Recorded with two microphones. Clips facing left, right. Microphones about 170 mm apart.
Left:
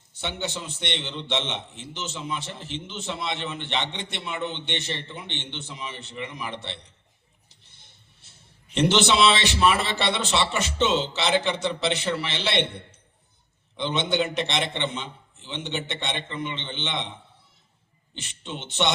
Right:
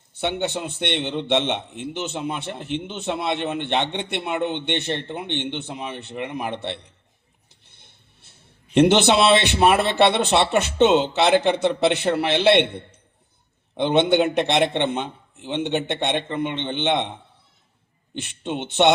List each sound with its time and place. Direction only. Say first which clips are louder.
0.1 s a man's voice: right 7 dB; 60° right (ahead or behind)